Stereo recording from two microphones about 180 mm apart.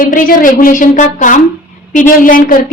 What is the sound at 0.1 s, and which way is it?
A woman's voice, 50° left (ahead or behind).